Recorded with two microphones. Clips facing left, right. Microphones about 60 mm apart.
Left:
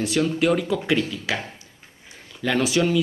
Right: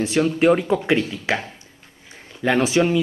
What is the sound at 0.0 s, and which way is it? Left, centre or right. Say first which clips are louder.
Speech: right 4 dB; right.